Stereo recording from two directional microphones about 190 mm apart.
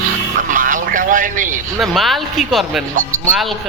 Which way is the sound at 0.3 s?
45° right (ahead or behind).